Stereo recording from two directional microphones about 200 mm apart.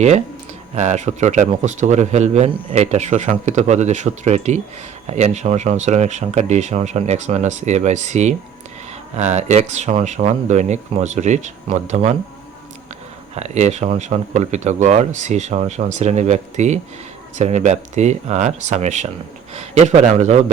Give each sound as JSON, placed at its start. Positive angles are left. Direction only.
{"t": 0.8, "sound": "speech", "side_deg": -35}
{"t": 13.3, "sound": "speech", "side_deg": -35}